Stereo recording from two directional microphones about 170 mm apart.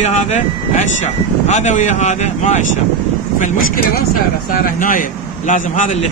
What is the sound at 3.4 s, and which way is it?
Speech, 55° left (ahead or behind).